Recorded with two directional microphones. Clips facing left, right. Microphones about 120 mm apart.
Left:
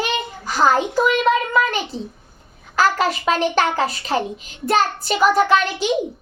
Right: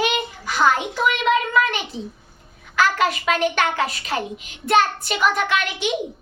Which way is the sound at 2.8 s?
35° left (ahead or behind).